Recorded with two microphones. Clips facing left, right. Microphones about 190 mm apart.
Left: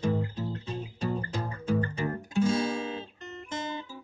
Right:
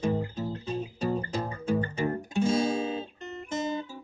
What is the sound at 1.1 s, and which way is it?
Guitar, 25° right (ahead or behind).